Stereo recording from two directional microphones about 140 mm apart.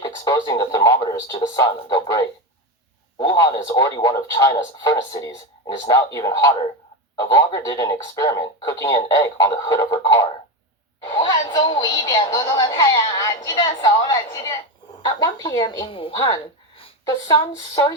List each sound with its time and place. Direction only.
0.0 s radio: 25° left (ahead or behind)
1.0 s speech: 25° left (ahead or behind)
11.0 s a sound: 35° left (ahead or behind)
11.3 s speech: 30° left (ahead or behind)
15.9 s speech: 40° left (ahead or behind)
16.1 s speech: 25° left (ahead or behind)